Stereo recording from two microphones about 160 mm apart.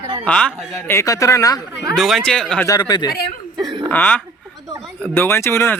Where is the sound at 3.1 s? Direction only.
75° left (ahead or behind).